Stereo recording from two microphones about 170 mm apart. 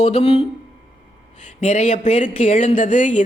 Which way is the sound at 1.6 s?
40° left (ahead or behind).